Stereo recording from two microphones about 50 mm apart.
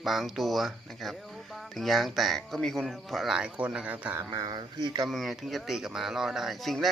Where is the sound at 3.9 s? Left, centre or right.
Right.